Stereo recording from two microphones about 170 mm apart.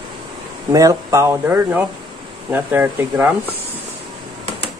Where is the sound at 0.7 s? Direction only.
20° right (ahead or behind).